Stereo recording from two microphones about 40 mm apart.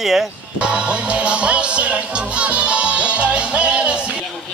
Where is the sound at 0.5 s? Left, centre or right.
Right.